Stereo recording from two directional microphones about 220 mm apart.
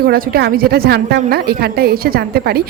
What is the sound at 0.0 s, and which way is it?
A woman's voice, 45° right (ahead or behind).